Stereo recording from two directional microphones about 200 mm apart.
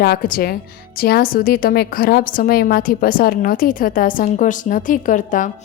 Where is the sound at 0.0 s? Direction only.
50° left (ahead or behind).